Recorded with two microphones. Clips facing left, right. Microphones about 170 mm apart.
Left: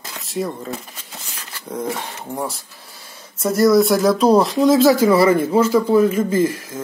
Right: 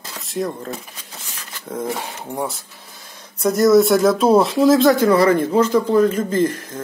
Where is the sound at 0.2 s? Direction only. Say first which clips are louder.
Even; centre (ahead or behind).